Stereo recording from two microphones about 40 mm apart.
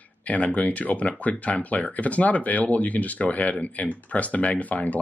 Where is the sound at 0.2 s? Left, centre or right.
Left.